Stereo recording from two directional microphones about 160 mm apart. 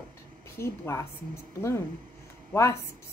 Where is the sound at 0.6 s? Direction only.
15° left (ahead or behind).